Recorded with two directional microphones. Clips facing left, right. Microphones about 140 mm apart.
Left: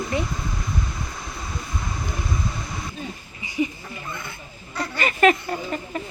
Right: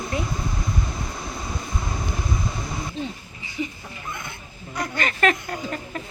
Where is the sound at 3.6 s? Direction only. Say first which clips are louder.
Left 5 dB; 15° left (ahead or behind).